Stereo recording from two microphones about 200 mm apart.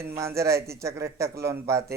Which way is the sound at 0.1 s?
15° right (ahead or behind).